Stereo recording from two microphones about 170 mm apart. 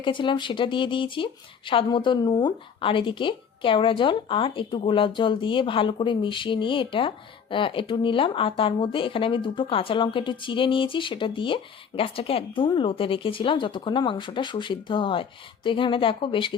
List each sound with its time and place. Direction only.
0.0 s speech: 30° left (ahead or behind)